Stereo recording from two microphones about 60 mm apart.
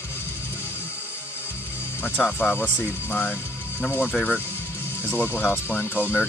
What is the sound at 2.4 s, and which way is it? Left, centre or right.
Speech, left.